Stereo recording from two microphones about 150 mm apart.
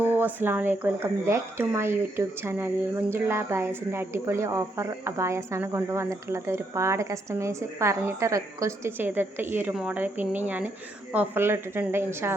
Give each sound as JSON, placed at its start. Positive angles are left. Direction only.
{"t": 0.0, "sound": "speech", "side_deg": -10}